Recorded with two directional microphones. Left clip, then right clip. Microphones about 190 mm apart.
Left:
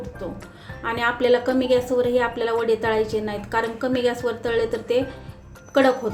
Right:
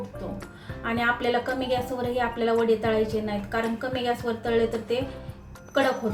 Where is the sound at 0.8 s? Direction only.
35° left (ahead or behind).